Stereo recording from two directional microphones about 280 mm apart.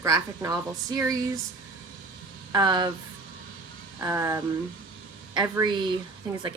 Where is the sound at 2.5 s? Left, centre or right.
Centre.